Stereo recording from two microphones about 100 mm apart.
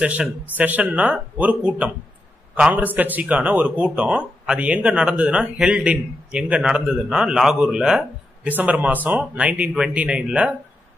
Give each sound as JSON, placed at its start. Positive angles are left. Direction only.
{"t": 0.0, "sound": "a man's voice", "side_deg": -15}